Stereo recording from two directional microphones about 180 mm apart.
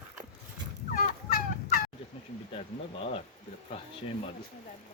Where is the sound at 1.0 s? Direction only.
50° left (ahead or behind).